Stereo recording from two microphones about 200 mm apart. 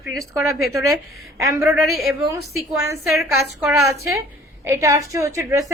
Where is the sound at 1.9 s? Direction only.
Centre (ahead or behind).